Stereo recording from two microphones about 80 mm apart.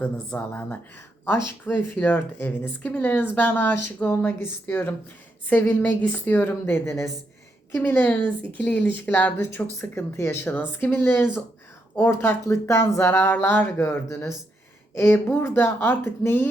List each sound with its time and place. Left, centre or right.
0.0 s speech: left
7.8 s a woman's voice: left